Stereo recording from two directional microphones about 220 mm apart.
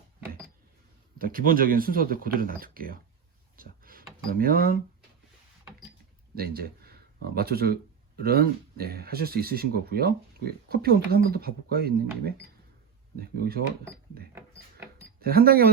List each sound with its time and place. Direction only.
1.2 s speech: 40° right (ahead or behind)
6.3 s speech: 45° right (ahead or behind)
15.2 s speech: 45° right (ahead or behind)